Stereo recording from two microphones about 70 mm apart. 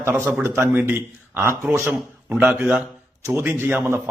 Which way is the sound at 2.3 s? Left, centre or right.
Centre.